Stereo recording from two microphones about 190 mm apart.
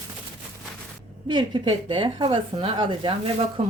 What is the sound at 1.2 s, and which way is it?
Speech, 25° right (ahead or behind).